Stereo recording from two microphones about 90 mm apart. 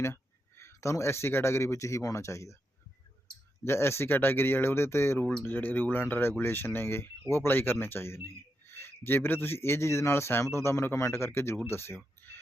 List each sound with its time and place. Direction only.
0.0 s speech: 30° left (ahead or behind)
3.6 s speech: 30° left (ahead or behind)